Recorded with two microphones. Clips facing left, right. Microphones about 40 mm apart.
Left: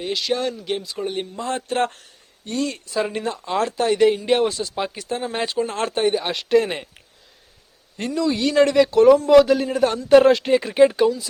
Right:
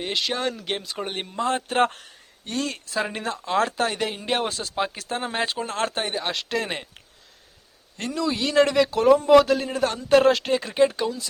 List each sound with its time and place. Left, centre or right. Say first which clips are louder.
0.0 s speech: left 3 dB; right
0.6 s speech: left 3 dB; right
1.5 s a man's voice: right 1 dB; centre
7.9 s speech: left 4 dB; centre
8.2 s a man's voice: left 3 dB; centre